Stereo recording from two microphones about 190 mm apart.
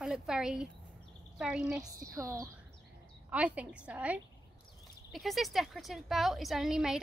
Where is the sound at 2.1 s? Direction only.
15° right (ahead or behind).